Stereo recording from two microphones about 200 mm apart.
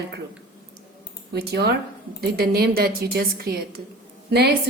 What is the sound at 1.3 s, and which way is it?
A woman's voice, 55° right (ahead or behind).